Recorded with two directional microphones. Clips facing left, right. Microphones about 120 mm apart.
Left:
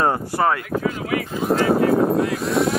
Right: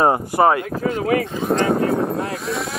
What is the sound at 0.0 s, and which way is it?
Speech, 20° right (ahead or behind).